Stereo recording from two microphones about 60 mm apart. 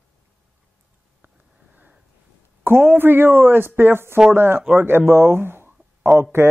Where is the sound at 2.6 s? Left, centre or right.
Right.